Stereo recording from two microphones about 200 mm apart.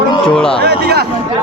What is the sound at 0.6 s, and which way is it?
Speech, 55° right (ahead or behind).